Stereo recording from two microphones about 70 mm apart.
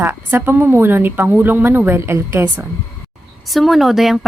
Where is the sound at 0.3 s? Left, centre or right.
Right.